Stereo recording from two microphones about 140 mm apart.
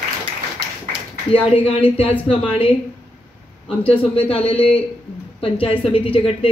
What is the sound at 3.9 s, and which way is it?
A woman's voice, 40° left (ahead or behind).